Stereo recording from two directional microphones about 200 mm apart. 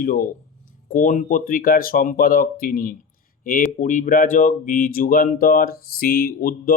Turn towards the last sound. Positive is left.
turn(degrees=50)  # may be behind; listen again after turning